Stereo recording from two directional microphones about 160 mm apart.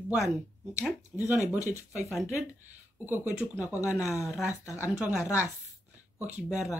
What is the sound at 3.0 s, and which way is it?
Speech, 10° right (ahead or behind).